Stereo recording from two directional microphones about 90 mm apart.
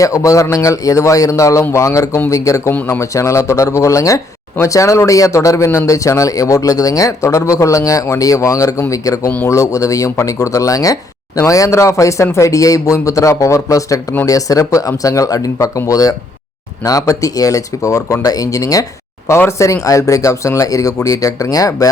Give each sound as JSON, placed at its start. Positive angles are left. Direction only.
{"t": 0.0, "sound": "a man's voice", "side_deg": 40}